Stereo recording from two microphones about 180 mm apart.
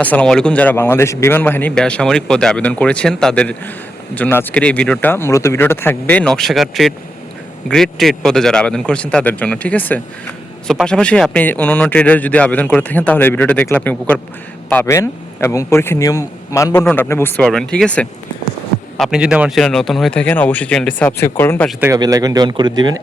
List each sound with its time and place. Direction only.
0.0 s speech: 10° left (ahead or behind)
21.8 s speech: 20° right (ahead or behind)